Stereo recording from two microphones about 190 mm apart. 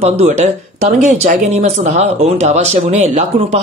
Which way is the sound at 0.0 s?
35° right (ahead or behind).